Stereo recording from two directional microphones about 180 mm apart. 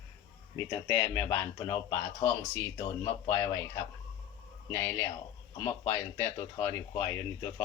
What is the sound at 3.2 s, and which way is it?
Speech, 15° left (ahead or behind).